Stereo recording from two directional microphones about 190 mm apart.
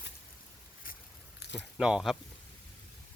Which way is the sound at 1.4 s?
60° left (ahead or behind).